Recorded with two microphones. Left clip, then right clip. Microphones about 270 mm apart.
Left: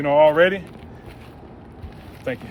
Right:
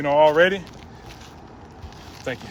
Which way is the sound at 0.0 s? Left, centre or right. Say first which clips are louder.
Left 1 dB; right.